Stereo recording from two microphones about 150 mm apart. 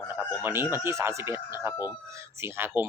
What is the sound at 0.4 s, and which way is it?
Speech, 15° right (ahead or behind).